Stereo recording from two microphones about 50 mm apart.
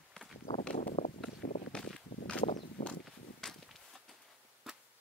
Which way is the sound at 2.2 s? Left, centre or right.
Left.